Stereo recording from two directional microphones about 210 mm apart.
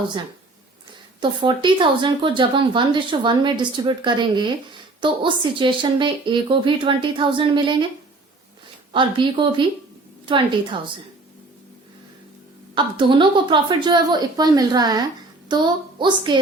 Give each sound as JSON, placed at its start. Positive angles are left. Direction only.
{"t": 1.2, "sound": "speech", "side_deg": -20}
{"t": 8.9, "sound": "speech", "side_deg": -25}
{"t": 12.7, "sound": "speech", "side_deg": -20}